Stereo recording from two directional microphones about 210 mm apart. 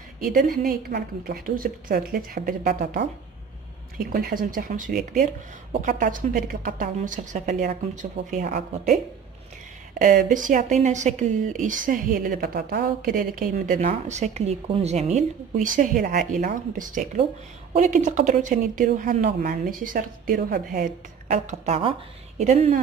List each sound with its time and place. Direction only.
0.2 s a woman's voice: 40° right (ahead or behind)